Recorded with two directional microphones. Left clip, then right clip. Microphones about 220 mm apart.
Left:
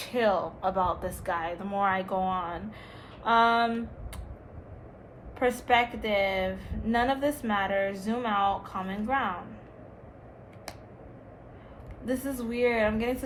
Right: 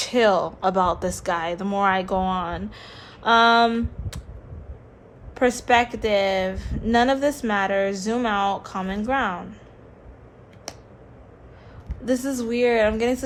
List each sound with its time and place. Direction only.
0.0 s speech: 40° right (ahead or behind)
5.3 s speech: 40° right (ahead or behind)
12.0 s speech: 40° right (ahead or behind)